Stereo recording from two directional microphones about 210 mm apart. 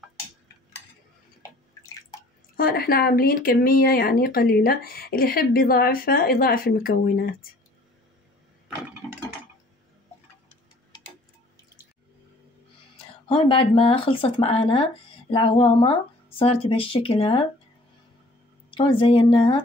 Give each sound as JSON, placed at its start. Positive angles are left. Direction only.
{"t": 2.5, "sound": "speech", "side_deg": 45}
{"t": 9.0, "sound": "a sound", "side_deg": 5}
{"t": 13.3, "sound": "speech", "side_deg": 25}
{"t": 18.7, "sound": "speech", "side_deg": 25}